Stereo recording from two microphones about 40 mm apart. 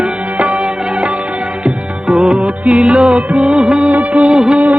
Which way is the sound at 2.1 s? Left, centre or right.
Right.